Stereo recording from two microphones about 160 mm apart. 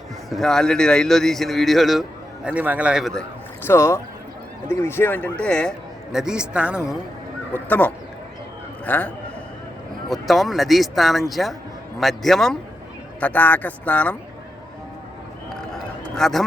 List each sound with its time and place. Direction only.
0.3 s a man's voice: centre (ahead or behind)
3.7 s a man's voice: 15° left (ahead or behind); by 6.7 s 5° right (ahead or behind)
7.5 s a man's voice: 10° left (ahead or behind)
15.4 s a sound: 5° left (ahead or behind)